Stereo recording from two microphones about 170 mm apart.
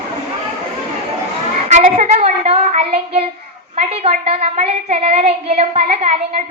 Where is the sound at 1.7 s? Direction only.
45° right (ahead or behind).